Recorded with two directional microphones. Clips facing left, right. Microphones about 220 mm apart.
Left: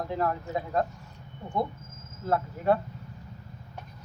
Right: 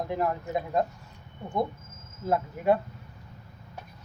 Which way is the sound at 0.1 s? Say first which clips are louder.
Right 1 dB; 15° right (ahead or behind).